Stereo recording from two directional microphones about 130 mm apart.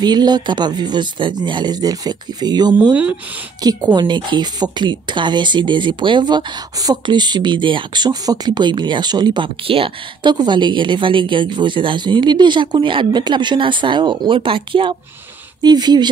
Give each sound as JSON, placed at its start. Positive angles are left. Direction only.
{"t": 0.0, "sound": "speech", "side_deg": -35}
{"t": 2.9, "sound": "speech", "side_deg": -10}
{"t": 3.6, "sound": "speech", "side_deg": -30}